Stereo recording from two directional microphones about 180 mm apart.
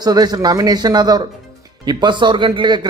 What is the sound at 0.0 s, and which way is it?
A man's voice, 20° right (ahead or behind).